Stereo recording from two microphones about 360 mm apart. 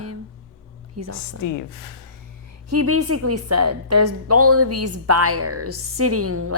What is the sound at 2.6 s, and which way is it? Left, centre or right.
A woman's voice, right.